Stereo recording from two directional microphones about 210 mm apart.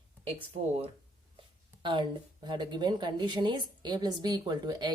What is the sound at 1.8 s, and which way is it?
Speech, 20° right (ahead or behind).